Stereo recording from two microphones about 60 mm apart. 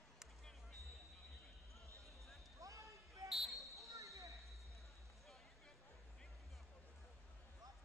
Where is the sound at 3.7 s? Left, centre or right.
Right.